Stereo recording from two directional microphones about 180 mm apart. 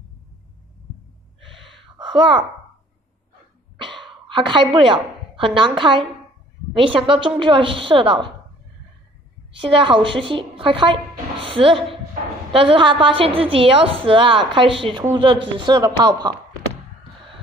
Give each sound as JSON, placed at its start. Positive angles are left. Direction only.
{"t": 2.0, "sound": "a sound", "side_deg": -25}
{"t": 4.3, "sound": "a woman's voice", "side_deg": -25}
{"t": 9.5, "sound": "a woman's voice", "side_deg": -30}